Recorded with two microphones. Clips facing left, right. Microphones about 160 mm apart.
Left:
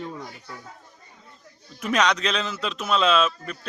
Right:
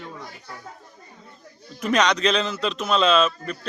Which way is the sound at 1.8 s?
5° left (ahead or behind).